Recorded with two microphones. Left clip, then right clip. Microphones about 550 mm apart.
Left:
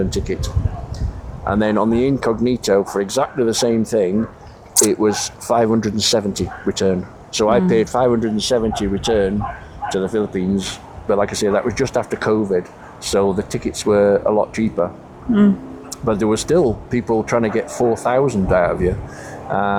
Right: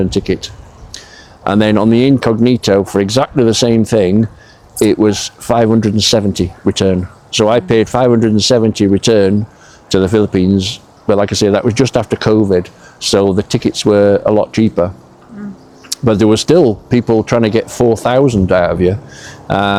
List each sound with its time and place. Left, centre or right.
0.1 s speech: right
15.9 s speech: right